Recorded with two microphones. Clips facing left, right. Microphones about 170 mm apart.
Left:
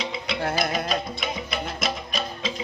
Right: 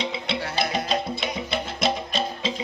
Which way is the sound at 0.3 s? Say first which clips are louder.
Left 2 dB; 30° right (ahead or behind).